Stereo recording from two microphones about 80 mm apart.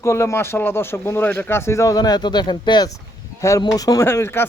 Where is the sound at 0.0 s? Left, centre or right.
Left.